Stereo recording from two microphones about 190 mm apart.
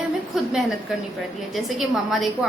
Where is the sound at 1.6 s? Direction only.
Centre (ahead or behind).